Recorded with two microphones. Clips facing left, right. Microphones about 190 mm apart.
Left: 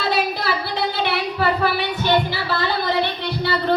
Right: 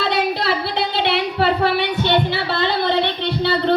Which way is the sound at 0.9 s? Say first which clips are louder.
Right 3 dB; 25° right (ahead or behind).